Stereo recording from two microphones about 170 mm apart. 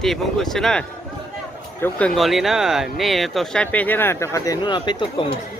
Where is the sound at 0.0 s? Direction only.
Centre (ahead or behind).